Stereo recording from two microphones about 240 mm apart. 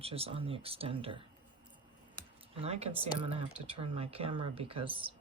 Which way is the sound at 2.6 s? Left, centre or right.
Right.